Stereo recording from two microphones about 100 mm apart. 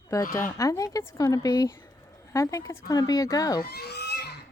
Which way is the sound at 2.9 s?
40° left (ahead or behind).